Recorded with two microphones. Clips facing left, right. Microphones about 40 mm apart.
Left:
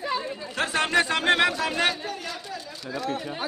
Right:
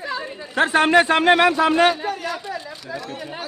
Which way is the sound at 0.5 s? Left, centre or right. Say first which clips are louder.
Right 8 dB; right.